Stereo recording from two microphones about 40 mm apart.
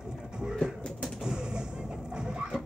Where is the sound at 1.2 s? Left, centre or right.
Centre.